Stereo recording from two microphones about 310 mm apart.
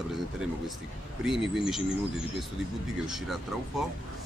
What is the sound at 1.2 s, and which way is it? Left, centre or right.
Speech, centre.